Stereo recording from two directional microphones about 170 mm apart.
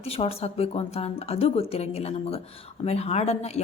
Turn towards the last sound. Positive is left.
turn(degrees=40)  # may be behind; listen again after turning